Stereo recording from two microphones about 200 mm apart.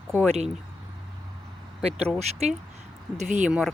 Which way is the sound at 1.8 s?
30° right (ahead or behind).